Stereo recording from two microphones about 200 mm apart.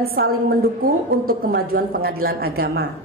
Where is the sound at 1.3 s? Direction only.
50° right (ahead or behind).